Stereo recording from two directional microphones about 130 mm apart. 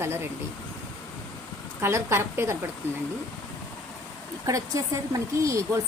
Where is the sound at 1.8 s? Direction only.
20° right (ahead or behind).